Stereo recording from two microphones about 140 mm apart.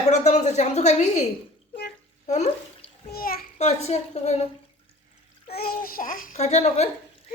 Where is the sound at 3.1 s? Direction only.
90° left.